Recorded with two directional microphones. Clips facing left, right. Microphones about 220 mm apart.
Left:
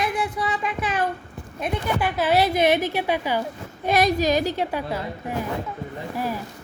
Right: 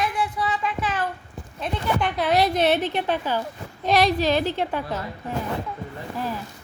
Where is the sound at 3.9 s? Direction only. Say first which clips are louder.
Even; 45° left (ahead or behind).